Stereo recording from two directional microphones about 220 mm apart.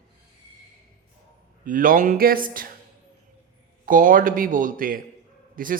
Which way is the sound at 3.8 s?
40° right (ahead or behind).